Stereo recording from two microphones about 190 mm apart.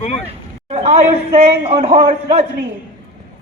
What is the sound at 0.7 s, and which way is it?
Speech, 30° right (ahead or behind).